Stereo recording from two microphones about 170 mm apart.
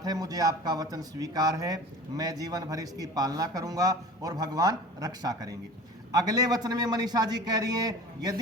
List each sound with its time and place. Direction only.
0.0 s speech: 20° right (ahead or behind)